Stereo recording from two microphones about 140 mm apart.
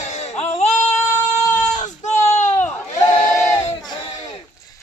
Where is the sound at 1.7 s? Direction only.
60° left (ahead or behind).